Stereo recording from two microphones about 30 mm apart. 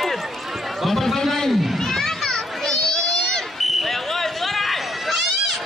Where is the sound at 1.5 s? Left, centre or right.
Centre.